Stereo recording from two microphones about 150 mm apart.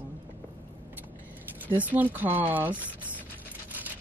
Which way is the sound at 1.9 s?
10° right (ahead or behind).